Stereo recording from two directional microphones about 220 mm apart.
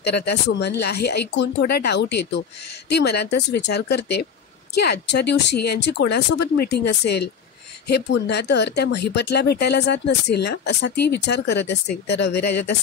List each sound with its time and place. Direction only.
0.0 s speech: 50° left (ahead or behind)